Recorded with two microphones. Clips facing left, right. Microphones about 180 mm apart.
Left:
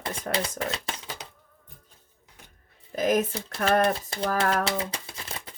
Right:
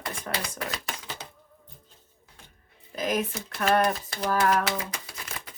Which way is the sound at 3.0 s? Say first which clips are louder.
Left 4 dB; 45° left (ahead or behind).